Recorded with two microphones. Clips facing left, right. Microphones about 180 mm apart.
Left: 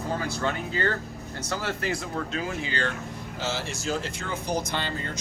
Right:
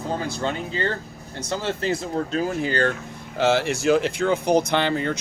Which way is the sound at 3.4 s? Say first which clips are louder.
Right 12 dB; 65° right (ahead or behind).